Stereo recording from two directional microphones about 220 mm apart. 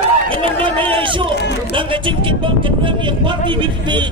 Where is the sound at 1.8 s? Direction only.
20° right (ahead or behind).